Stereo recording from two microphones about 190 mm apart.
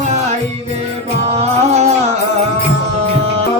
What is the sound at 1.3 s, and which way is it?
Music, 35° right (ahead or behind).